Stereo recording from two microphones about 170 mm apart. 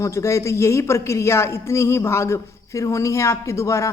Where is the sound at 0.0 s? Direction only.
20° left (ahead or behind).